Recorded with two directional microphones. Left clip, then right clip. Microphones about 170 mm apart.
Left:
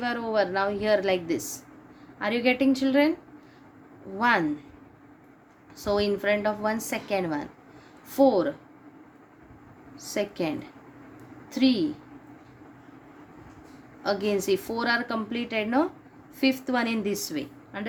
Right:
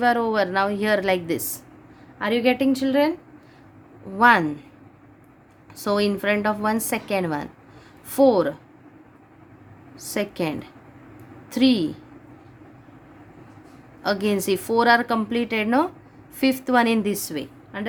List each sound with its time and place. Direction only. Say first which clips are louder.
0.0 s a woman's voice: right 6 dB; 45° right (ahead or behind)
2.1 s a woman's voice: right 4 dB; 30° right (ahead or behind)
4.2 s a woman's voice: right 7 dB; 40° right (ahead or behind)
5.7 s a woman's voice: right 3 dB; 45° right (ahead or behind)
10.0 s a woman's voice: right 3 dB; 45° right (ahead or behind)
14.0 s a woman's voice: right 3 dB; 45° right (ahead or behind); by 17.8 s 25° right (ahead or behind)